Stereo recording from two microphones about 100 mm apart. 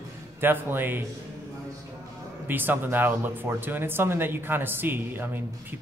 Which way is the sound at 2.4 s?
20° right (ahead or behind).